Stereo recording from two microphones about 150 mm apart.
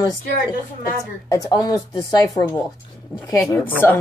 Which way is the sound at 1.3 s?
25° left (ahead or behind).